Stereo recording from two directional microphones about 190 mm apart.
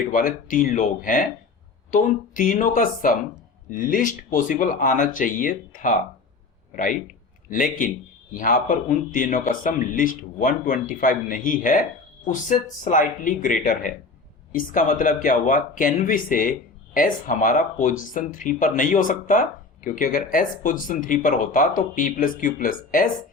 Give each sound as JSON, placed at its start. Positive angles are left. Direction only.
{"t": 0.1, "sound": "speech", "side_deg": 45}
{"t": 7.5, "sound": "speech", "side_deg": 45}